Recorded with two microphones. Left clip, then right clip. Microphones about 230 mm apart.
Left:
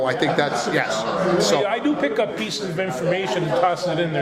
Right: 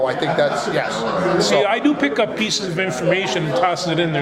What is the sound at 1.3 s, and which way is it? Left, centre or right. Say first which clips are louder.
Speech: right 5 dB; right.